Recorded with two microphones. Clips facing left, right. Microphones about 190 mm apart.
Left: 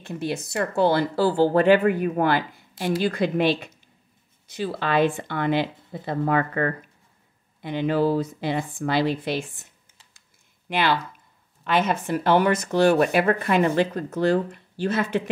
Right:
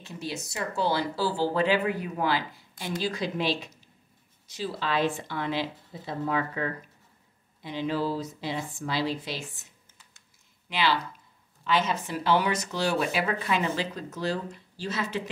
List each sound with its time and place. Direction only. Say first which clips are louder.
0.0 s speech: left 7 dB; 55° left (ahead or behind)
10.7 s speech: left 4 dB; 55° left (ahead or behind)